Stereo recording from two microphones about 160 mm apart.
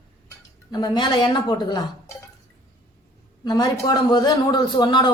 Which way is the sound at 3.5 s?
25° left (ahead or behind).